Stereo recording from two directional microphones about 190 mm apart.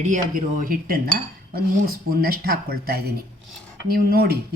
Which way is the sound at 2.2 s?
55° right (ahead or behind).